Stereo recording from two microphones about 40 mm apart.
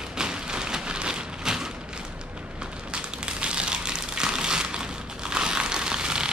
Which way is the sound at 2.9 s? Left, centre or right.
Right.